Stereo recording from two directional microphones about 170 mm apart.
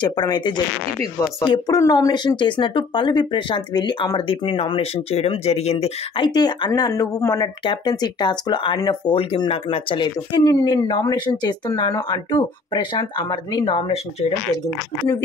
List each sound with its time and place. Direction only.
0.0 s speech: 25° left (ahead or behind)